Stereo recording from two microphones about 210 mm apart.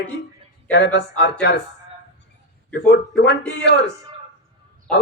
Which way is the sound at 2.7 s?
50° left (ahead or behind).